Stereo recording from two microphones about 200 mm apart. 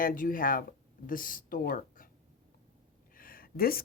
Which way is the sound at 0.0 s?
45° left (ahead or behind).